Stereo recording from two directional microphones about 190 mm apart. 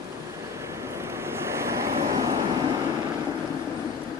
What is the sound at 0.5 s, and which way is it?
Vehicle, 15° right (ahead or behind).